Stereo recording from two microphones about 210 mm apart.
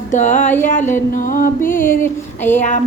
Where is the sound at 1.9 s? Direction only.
10° left (ahead or behind).